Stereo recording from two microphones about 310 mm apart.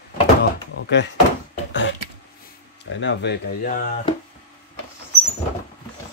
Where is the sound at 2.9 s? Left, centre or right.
Left.